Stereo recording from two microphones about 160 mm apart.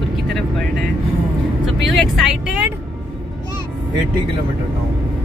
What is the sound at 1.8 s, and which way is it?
Vehicle, centre (ahead or behind).